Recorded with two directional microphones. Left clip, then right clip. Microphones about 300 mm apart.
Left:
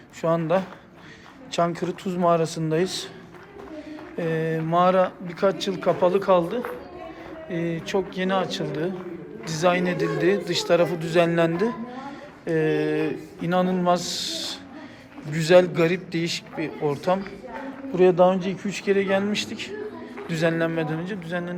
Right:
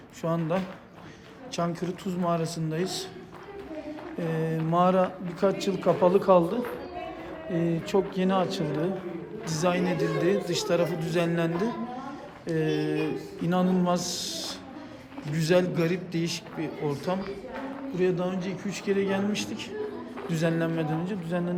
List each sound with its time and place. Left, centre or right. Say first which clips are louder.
0.2 s a man's voice: left 7 dB; centre
4.2 s a man's voice: left 5 dB; centre